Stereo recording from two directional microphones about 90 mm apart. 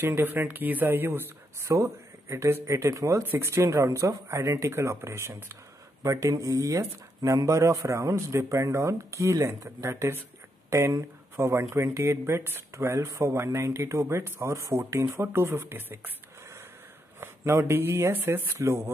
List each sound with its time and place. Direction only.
0.0 s speech: 25° right (ahead or behind)